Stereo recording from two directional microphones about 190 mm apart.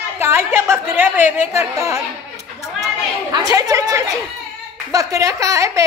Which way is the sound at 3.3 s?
20° right (ahead or behind).